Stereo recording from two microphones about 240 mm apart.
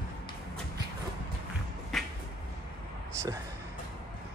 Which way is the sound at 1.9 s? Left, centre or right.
Centre.